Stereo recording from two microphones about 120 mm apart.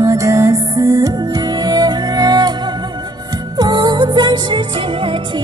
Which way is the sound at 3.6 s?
35° right (ahead or behind).